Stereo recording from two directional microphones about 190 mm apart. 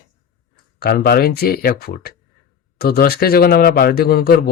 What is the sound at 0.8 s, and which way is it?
A man's voice, 55° left (ahead or behind).